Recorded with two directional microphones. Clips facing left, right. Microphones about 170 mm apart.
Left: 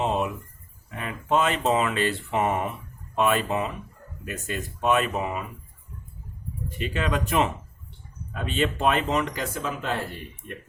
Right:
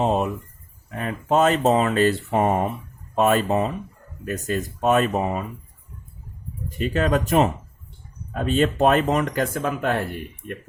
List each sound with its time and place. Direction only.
0.0 s a sound: 40° right (ahead or behind)
0.9 s speech: 40° right (ahead or behind)
6.7 s speech: 40° right (ahead or behind)